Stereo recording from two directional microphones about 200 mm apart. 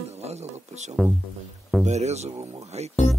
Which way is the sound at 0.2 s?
35° right (ahead or behind).